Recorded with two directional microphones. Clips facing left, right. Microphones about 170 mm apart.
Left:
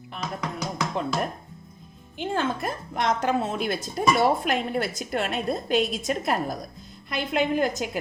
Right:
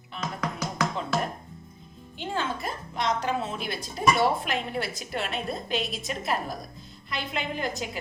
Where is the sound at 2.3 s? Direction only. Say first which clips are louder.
Left 3 dB; 50° left (ahead or behind).